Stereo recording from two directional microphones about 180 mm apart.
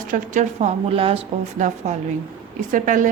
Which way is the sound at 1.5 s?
40° right (ahead or behind).